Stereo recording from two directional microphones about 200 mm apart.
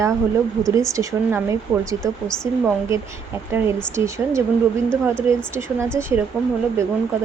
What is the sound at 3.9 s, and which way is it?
Speech, 15° right (ahead or behind).